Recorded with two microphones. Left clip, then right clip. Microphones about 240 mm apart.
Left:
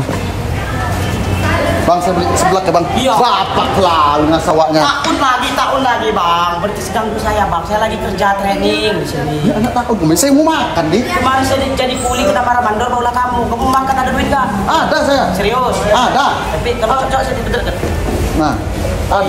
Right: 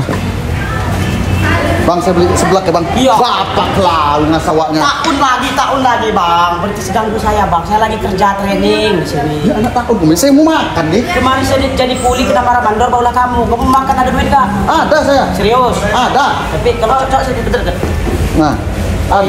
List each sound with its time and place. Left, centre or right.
2.5 s speech: centre
5.2 s speech: centre
7.8 s speech: centre
10.0 s speech: centre
14.3 s speech: centre
16.6 s speech: centre